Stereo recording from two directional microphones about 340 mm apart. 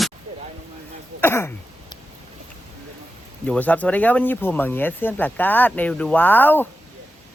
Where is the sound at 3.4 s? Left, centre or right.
Centre.